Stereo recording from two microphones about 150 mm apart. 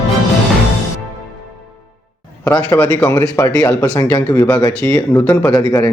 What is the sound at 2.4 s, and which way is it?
A man's voice, 15° left (ahead or behind).